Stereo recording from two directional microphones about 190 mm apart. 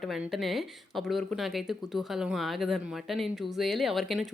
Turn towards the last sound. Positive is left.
turn(degrees=0)  # may be behind; listen again after turning